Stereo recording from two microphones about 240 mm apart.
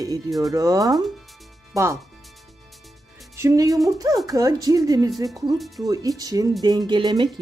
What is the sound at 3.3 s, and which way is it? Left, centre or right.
Speech, centre.